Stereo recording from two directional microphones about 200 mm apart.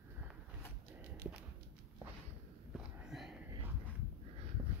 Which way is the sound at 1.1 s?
55° right (ahead or behind).